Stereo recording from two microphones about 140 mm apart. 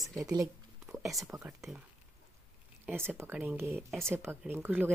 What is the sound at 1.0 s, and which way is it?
Speech, centre (ahead or behind).